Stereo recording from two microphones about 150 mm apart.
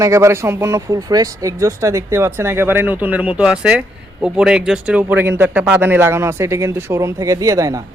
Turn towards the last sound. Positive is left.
turn(degrees=-20)  # may be behind; listen again after turning